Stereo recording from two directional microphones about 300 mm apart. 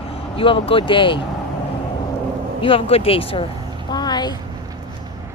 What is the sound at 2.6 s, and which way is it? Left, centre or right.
Speech, centre.